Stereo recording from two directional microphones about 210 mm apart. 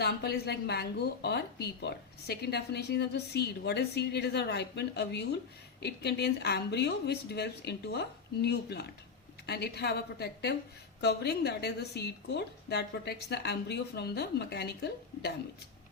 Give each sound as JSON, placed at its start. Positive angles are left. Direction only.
{"t": 0.0, "sound": "a woman's voice", "side_deg": 50}